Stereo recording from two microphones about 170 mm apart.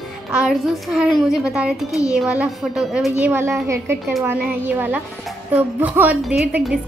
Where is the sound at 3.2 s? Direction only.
15° right (ahead or behind).